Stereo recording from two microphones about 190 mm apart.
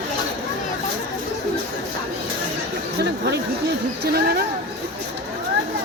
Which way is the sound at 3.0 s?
60° right (ahead or behind).